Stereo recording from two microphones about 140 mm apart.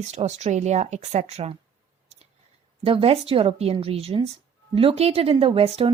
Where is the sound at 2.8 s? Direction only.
40° right (ahead or behind).